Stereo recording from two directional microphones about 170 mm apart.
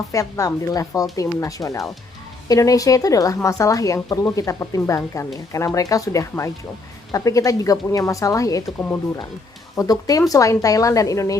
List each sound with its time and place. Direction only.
0.1 s speech: 20° left (ahead or behind)
9.7 s speech: 20° left (ahead or behind)